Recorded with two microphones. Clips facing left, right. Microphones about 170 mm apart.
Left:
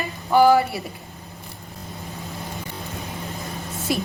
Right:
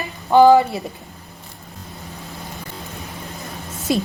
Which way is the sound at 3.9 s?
20° right (ahead or behind).